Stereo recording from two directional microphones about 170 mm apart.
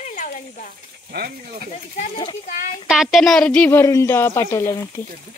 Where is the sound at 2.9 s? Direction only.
Centre (ahead or behind); by 5.1 s 15° left (ahead or behind).